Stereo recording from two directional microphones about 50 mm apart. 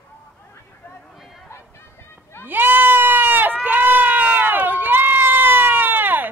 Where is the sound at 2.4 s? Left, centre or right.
Right.